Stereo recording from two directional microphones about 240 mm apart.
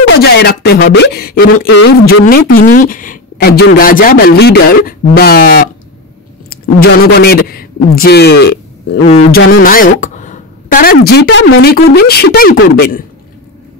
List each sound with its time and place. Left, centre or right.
0.0 s a woman's voice: left